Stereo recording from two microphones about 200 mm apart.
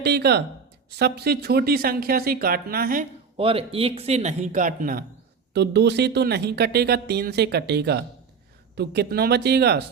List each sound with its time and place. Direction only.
0.0 s speech: 55° right (ahead or behind)
3.3 s a man's voice: 30° right (ahead or behind); by 5.0 s 45° right (ahead or behind)
5.5 s speech: 60° right (ahead or behind)